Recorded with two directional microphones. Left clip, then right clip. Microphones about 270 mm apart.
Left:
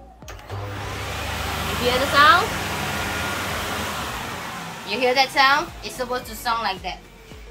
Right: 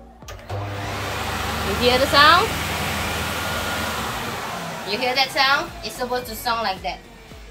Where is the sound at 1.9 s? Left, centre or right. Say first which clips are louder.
Right 1 dB; right.